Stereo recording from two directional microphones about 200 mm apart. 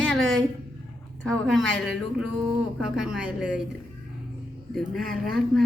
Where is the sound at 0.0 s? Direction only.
5° left (ahead or behind).